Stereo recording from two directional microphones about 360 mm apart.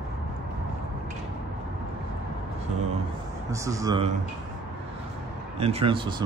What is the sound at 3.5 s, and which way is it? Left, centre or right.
Speech, centre.